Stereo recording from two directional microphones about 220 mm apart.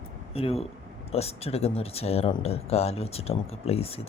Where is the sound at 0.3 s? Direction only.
25° left (ahead or behind).